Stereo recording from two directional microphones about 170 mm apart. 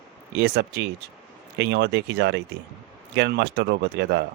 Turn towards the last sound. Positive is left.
turn(degrees=-75)  # may be behind; listen again after turning